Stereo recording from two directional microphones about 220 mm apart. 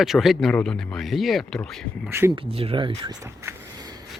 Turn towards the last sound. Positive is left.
turn(degrees=-15)  # may be behind; listen again after turning